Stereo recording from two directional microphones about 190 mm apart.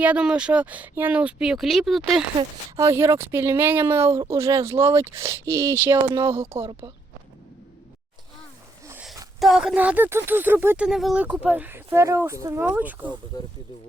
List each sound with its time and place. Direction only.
0.0 s speech: 5° right (ahead or behind)
2.7 s speech: 15° right (ahead or behind)
9.4 s speech: centre (ahead or behind)
13.3 s speech: 20° left (ahead or behind)